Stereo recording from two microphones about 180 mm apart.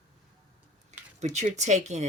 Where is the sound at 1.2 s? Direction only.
40° right (ahead or behind).